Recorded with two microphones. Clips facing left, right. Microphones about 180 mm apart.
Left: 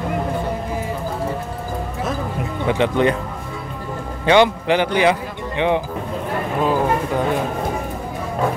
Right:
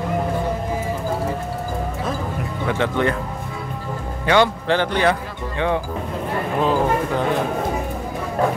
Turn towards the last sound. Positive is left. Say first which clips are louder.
# even
turn(degrees=5)  # may be behind; listen again after turning